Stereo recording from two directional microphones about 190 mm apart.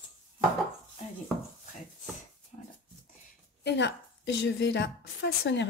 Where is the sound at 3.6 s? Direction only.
65° left (ahead or behind).